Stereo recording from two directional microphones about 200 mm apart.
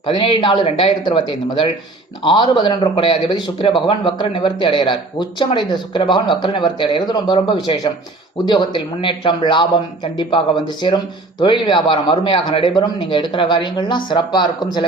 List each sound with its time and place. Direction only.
0.0 s speech: 25° left (ahead or behind)